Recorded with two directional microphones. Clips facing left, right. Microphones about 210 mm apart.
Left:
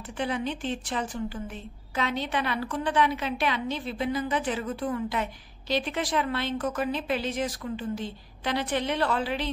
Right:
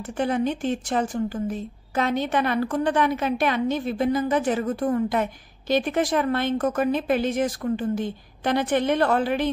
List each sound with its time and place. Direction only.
0.0 s a woman's voice: 45° right (ahead or behind)